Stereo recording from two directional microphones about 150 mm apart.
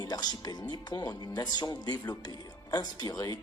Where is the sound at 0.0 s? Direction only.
25° left (ahead or behind).